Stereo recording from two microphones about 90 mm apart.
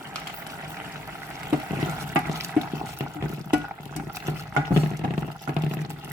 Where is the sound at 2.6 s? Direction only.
10° right (ahead or behind).